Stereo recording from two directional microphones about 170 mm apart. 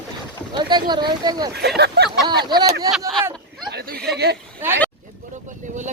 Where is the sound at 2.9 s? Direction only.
Centre (ahead or behind).